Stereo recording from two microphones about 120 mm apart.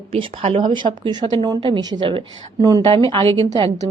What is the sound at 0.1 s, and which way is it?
A woman's voice, 45° right (ahead or behind).